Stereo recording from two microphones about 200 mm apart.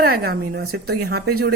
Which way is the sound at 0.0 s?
50° right (ahead or behind).